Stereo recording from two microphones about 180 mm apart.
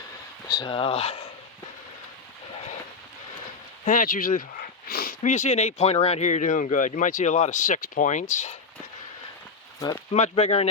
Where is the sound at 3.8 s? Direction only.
50° left (ahead or behind).